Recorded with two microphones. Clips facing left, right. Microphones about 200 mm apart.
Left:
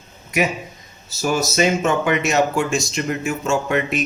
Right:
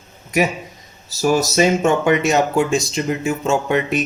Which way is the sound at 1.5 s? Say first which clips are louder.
Right 3 dB; 30° right (ahead or behind).